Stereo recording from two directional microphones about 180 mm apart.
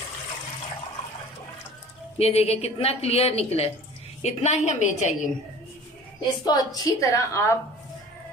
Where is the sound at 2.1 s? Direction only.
35° left (ahead or behind).